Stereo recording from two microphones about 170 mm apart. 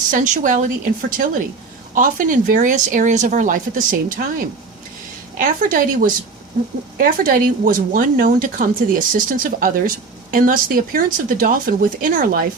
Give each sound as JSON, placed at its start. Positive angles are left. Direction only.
{"t": 0.1, "sound": "speech", "side_deg": -50}